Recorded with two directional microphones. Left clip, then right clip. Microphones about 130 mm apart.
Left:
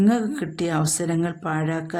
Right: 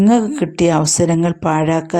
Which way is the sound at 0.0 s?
40° right (ahead or behind).